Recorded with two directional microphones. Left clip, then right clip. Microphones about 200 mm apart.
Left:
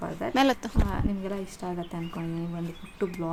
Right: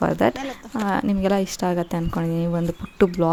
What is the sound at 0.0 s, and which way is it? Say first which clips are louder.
Speech: right 4 dB; 45° right (ahead or behind).